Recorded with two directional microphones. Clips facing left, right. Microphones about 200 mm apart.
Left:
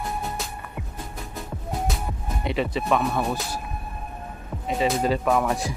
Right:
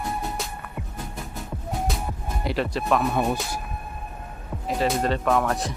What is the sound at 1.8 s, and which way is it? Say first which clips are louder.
Music: even; centre (ahead or behind).